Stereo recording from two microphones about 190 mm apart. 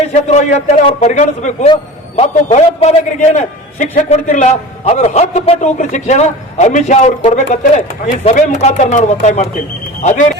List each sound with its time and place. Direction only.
0.0 s a man's voice: 35° left (ahead or behind)